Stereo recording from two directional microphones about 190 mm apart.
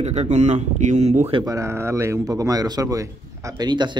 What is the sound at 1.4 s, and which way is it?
Speech, 15° right (ahead or behind).